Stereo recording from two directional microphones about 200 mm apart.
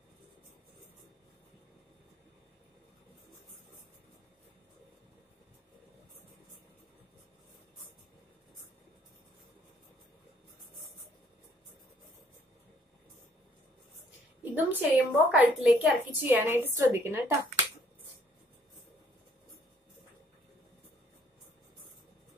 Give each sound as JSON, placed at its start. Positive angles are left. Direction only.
{"t": 14.4, "sound": "a woman's voice", "side_deg": -10}